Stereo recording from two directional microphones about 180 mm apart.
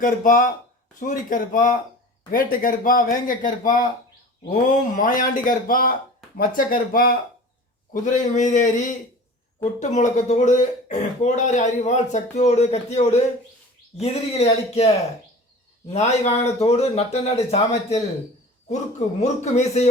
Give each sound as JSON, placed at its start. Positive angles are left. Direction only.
{"t": 0.0, "sound": "speech", "side_deg": 45}